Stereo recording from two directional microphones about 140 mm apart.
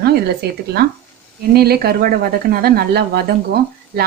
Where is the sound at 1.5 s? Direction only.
90° right.